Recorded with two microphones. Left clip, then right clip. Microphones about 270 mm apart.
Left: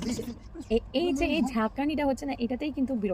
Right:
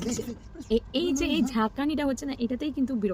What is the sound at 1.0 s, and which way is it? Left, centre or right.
A woman's voice, centre.